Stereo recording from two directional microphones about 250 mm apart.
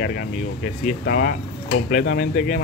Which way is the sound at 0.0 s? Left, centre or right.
Left.